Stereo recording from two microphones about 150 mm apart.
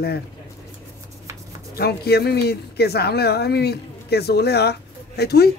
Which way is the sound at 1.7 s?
90° left.